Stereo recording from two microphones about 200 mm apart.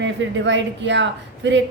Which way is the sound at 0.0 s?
65° right (ahead or behind).